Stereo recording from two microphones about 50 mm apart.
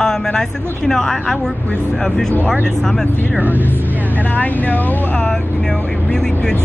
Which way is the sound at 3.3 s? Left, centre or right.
Right.